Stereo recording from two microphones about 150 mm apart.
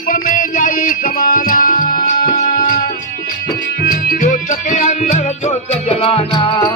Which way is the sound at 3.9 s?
70° left (ahead or behind).